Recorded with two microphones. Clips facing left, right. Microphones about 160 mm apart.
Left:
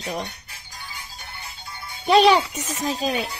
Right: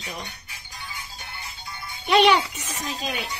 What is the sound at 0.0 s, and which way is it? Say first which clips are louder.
Speech: left 7 dB; 40° left (ahead or behind).